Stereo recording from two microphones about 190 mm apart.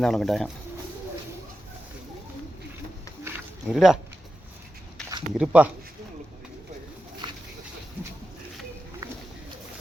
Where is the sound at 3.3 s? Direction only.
Centre (ahead or behind).